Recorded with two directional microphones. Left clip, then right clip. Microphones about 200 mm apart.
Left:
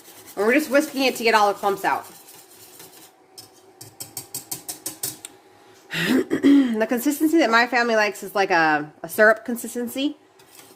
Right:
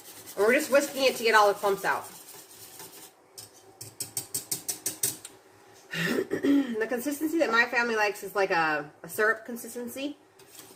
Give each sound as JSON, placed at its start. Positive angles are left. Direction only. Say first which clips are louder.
{"t": 0.3, "sound": "speech", "louder": "left 4 dB", "side_deg": 45}
{"t": 5.9, "sound": "speech", "louder": "left 7 dB", "side_deg": 55}